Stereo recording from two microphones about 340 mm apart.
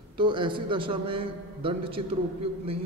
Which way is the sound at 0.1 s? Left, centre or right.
Centre.